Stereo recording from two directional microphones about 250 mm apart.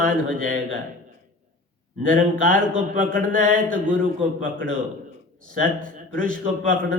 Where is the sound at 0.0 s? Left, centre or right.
Right.